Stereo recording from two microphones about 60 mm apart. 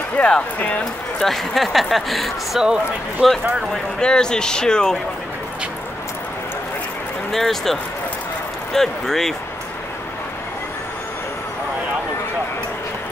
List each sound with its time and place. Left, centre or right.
0.2 s speech: left
1.2 s speech: centre
2.6 s speech: centre
4.0 s speech: centre
7.3 s speech: centre